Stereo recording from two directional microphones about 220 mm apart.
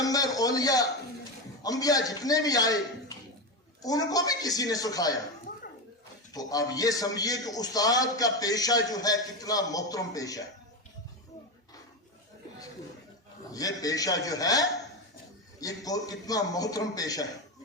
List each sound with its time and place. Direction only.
0.0 s a sound: 15° left (ahead or behind)
1.6 s a man's voice: 15° left (ahead or behind)
3.8 s a man's voice: 15° left (ahead or behind)
6.3 s a man's voice: 15° left (ahead or behind)
13.5 s a man's voice: 15° left (ahead or behind)
15.6 s a man's voice: 15° left (ahead or behind)